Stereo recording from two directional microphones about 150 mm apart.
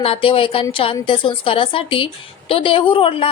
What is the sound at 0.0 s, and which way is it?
Speech, 35° left (ahead or behind).